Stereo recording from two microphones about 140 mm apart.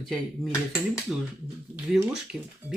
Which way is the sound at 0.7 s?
20° left (ahead or behind).